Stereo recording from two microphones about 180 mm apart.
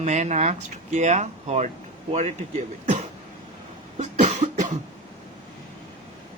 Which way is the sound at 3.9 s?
40° right (ahead or behind).